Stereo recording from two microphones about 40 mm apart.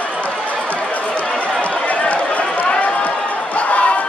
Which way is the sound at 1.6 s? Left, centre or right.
Left.